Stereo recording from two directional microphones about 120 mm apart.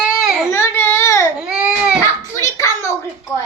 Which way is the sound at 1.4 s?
10° right (ahead or behind).